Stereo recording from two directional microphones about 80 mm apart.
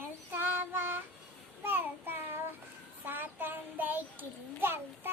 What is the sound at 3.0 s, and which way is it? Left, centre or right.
A child's voice, right.